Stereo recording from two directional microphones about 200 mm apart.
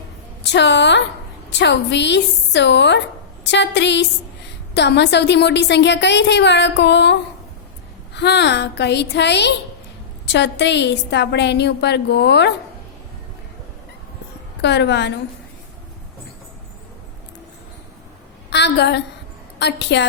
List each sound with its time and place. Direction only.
0.4 s a woman's voice: 60° left (ahead or behind)
14.6 s a woman's voice: 60° left (ahead or behind)
18.5 s a woman's voice: 60° left (ahead or behind)